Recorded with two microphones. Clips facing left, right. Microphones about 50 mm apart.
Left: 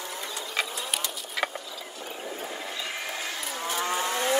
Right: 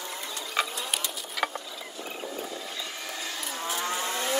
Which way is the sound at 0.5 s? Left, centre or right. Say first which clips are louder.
Right 2 dB; centre.